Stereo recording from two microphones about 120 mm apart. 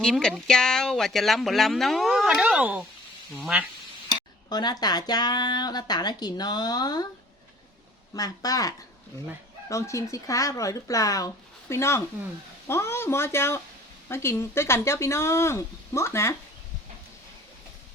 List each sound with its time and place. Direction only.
0.0 s speech: 5° left (ahead or behind)
4.4 s speech: 35° left (ahead or behind)
8.1 s speech: 30° left (ahead or behind)